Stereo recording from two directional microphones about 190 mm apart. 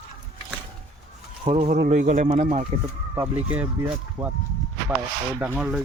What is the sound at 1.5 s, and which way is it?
Speech, 35° right (ahead or behind).